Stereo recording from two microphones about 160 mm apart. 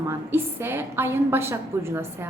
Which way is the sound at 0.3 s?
15° right (ahead or behind).